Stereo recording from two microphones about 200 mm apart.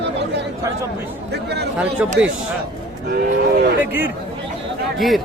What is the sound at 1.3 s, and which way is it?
Speech, 55° right (ahead or behind).